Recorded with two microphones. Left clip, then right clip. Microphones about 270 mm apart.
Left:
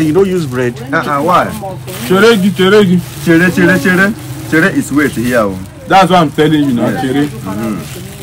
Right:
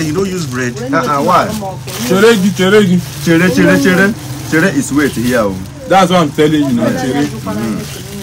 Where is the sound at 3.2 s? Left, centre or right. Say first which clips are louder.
Left 1 dB; centre.